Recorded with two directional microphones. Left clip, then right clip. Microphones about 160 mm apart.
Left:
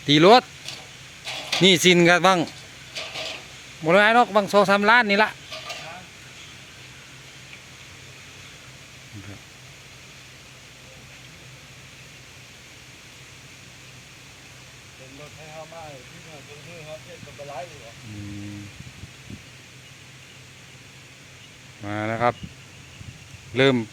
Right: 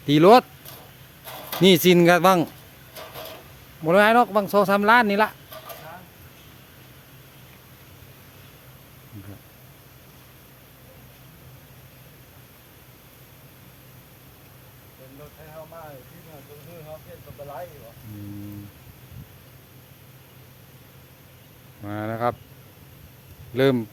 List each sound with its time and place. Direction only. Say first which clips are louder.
0.0 s speech: even; 10° right (ahead or behind)
1.2 s speech: left 1 dB; 20° right (ahead or behind)
3.0 s a sound: left 6 dB; 20° right (ahead or behind)
3.8 s speech: even; 5° right (ahead or behind)
21.8 s a sound: left 3 dB; 10° left (ahead or behind)
23.6 s speech: left 1 dB; centre (ahead or behind)